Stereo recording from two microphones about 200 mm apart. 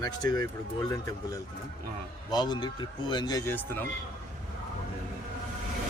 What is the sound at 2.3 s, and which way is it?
Speech, 20° left (ahead or behind).